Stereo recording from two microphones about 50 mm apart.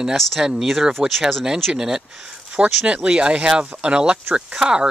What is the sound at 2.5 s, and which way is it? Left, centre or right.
Speech, right.